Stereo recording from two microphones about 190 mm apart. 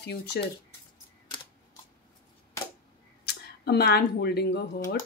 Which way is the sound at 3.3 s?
60° left (ahead or behind).